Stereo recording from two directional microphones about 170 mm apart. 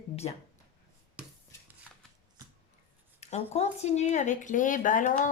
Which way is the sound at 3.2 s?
40° left (ahead or behind).